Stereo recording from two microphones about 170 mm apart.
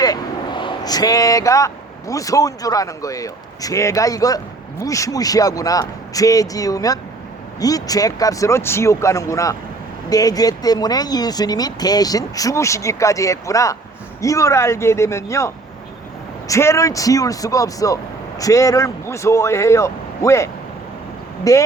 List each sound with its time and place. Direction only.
0.0 s speech: 25° left (ahead or behind)